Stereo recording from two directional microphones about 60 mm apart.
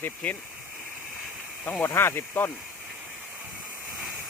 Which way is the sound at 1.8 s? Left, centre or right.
Left.